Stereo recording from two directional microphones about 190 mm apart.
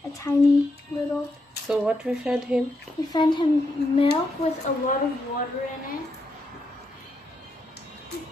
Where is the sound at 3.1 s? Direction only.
25° left (ahead or behind).